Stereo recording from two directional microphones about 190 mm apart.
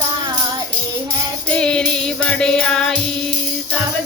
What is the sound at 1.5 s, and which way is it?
Music, 5° left (ahead or behind).